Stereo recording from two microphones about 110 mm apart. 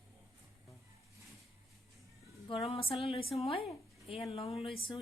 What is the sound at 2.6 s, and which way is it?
A woman's voice, 55° left (ahead or behind).